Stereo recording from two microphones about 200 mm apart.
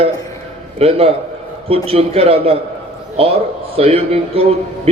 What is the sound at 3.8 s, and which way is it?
Speech, 30° right (ahead or behind).